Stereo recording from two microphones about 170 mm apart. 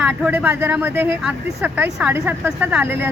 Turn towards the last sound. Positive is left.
turn(degrees=-15)  # may be behind; listen again after turning